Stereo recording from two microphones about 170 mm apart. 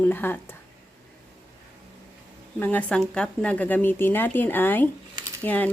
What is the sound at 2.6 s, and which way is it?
A woman's voice, 10° left (ahead or behind).